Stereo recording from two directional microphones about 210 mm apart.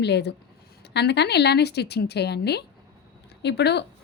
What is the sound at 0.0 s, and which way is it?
A woman's voice, 55° left (ahead or behind).